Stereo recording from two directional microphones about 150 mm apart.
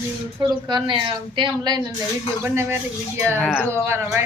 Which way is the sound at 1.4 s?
30° right (ahead or behind).